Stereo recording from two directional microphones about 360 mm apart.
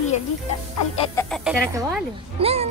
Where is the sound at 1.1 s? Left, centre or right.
Centre.